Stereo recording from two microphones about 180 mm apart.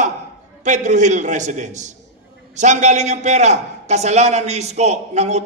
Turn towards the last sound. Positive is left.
turn(degrees=-40)  # may be behind; listen again after turning